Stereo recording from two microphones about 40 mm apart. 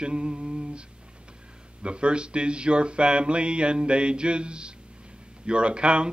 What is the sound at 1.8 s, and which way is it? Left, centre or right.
Speech, right.